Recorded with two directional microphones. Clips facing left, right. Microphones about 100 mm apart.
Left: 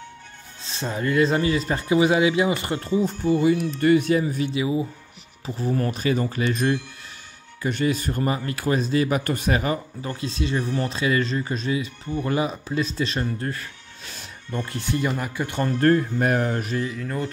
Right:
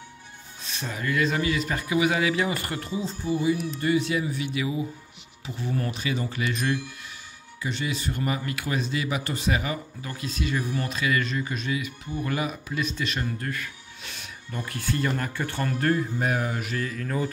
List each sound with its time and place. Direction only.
0.6 s speech: 30° left (ahead or behind)
3.0 s speech: 55° left (ahead or behind); by 4.5 s 40° left (ahead or behind)
4.5 s speech: 25° left (ahead or behind)
5.6 s speech: 40° left (ahead or behind)
7.6 s speech: 50° left (ahead or behind)
10.0 s speech: 30° left (ahead or behind)
15.8 s speech: 50° left (ahead or behind)
16.7 s speech: 20° left (ahead or behind)